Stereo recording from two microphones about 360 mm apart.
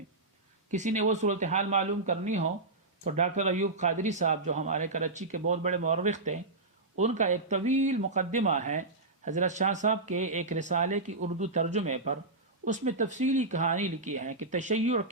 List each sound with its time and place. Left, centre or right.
0.7 s speech: centre